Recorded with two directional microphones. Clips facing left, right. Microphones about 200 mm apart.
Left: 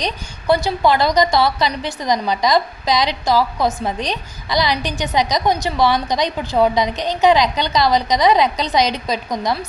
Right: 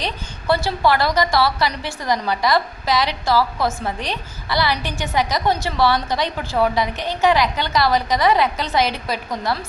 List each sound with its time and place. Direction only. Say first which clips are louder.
0.0 s a woman's voice: left 3 dB; 15° left (ahead or behind)